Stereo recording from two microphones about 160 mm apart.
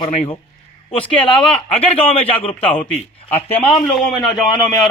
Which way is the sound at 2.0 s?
35° left (ahead or behind).